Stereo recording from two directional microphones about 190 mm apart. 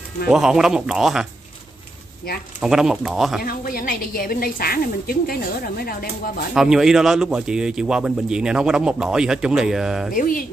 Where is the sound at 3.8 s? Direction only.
50° left (ahead or behind).